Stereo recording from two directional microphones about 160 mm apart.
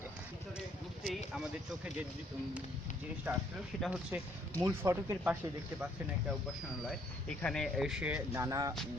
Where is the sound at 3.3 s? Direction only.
10° right (ahead or behind).